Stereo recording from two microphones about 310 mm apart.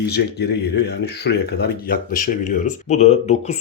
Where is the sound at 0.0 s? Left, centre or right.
Left.